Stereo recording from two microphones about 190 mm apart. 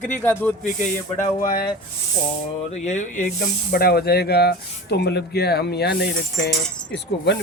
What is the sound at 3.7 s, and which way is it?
Speech, 55° left (ahead or behind).